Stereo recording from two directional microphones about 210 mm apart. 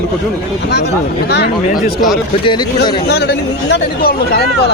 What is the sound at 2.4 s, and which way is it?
Speech, 20° left (ahead or behind).